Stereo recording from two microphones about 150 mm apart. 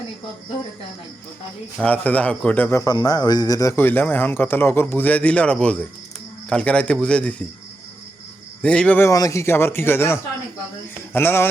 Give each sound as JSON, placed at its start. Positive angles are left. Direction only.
{"t": 1.8, "sound": "a man's voice", "side_deg": 10}
{"t": 8.6, "sound": "a man's voice", "side_deg": 5}
{"t": 9.0, "sound": "a man's voice", "side_deg": 20}